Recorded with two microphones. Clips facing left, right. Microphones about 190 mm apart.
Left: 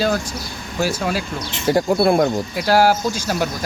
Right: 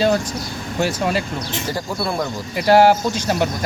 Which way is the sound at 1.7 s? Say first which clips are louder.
Left 11 dB; 60° left (ahead or behind).